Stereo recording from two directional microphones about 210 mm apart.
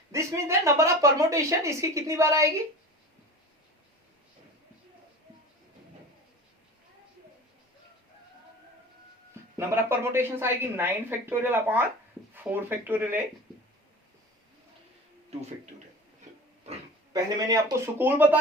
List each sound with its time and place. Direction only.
0.1 s a woman's voice: 15° right (ahead or behind)
9.3 s a woman's voice: 10° right (ahead or behind)
15.3 s speech: 30° right (ahead or behind)
16.6 s speech: 20° right (ahead or behind)